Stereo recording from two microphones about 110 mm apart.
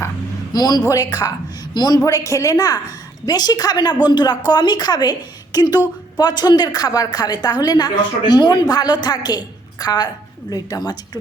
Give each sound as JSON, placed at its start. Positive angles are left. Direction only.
{"t": 0.5, "sound": "a woman's voice", "side_deg": 35}
{"t": 2.0, "sound": "a woman's voice", "side_deg": 30}